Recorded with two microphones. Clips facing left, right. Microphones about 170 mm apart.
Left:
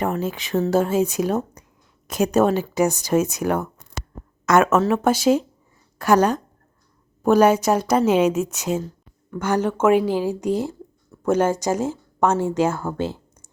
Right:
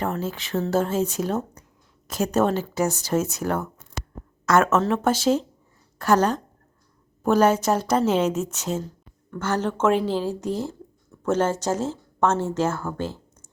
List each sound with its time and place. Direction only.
0.0 s speech: 15° left (ahead or behind)